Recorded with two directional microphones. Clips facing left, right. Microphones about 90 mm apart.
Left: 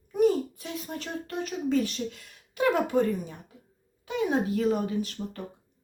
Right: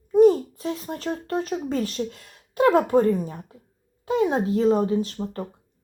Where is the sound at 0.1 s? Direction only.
35° right (ahead or behind).